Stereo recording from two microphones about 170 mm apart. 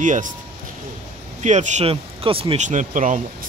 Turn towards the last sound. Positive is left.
turn(degrees=-45)  # may be behind; listen again after turning